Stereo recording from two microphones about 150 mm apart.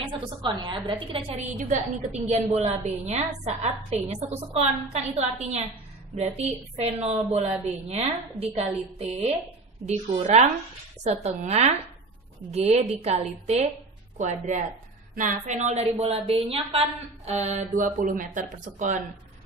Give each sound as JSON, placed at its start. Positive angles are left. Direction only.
{"t": 0.0, "sound": "a woman's voice", "side_deg": -30}